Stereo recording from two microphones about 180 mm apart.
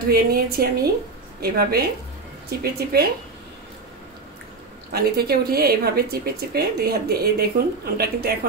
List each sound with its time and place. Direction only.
0.1 s speech: 55° right (ahead or behind)
4.9 s speech: 60° right (ahead or behind)